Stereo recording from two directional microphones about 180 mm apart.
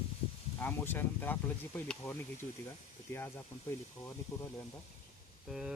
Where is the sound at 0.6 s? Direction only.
10° left (ahead or behind).